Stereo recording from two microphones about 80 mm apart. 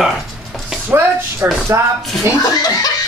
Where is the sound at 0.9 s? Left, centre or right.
Right.